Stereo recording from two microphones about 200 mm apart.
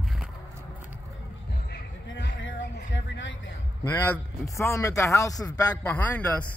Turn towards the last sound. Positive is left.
turn(degrees=10)  # may be behind; listen again after turning